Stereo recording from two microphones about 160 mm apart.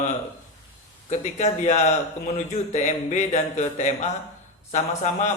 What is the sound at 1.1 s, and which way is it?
A man's voice, 50° left (ahead or behind).